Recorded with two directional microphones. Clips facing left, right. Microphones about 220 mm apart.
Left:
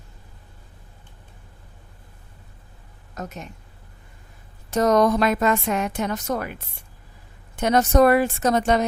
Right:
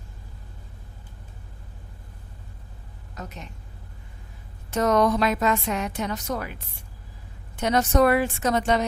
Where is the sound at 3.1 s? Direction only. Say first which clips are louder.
Left 5 dB; 45° left (ahead or behind).